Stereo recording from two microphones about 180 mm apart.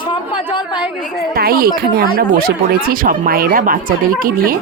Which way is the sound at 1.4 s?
55° right (ahead or behind).